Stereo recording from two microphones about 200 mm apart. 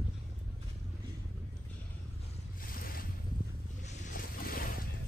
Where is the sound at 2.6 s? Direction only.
45° left (ahead or behind).